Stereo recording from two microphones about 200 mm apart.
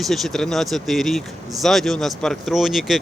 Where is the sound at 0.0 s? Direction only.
Centre (ahead or behind).